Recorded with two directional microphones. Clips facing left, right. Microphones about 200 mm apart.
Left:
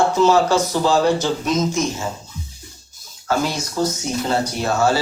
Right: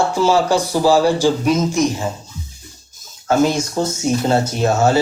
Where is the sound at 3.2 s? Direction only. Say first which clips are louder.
Right 6 dB; 25° right (ahead or behind).